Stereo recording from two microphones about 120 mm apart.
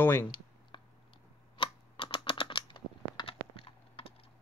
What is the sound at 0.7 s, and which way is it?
Chewing, 45° left (ahead or behind).